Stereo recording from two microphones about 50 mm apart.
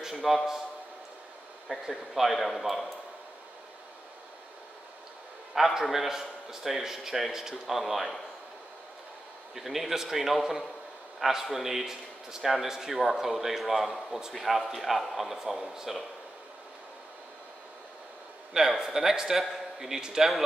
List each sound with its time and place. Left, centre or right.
0.0 s a sound: centre
1.7 s speech: centre
2.2 s a man's voice: centre
5.5 s a man's voice: centre
9.6 s a man's voice: centre
18.5 s a man's voice: centre